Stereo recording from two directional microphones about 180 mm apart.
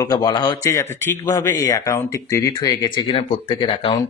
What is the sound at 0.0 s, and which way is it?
Speech, 20° left (ahead or behind).